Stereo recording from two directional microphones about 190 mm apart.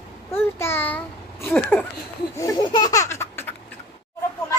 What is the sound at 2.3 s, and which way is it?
Laughter, 20° left (ahead or behind).